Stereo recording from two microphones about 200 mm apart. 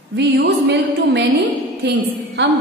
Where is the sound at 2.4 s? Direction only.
60° right (ahead or behind).